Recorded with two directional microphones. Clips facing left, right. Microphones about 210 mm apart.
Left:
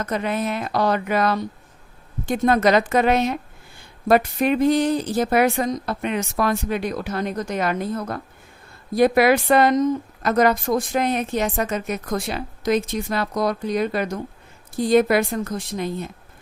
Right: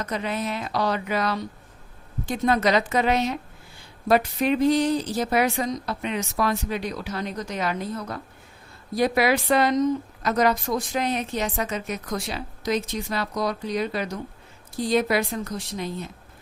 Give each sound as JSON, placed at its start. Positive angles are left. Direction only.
{"t": 0.0, "sound": "a woman's voice", "side_deg": 50}